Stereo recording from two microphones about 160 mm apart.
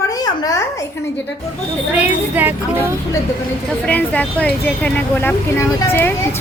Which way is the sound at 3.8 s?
10° left (ahead or behind).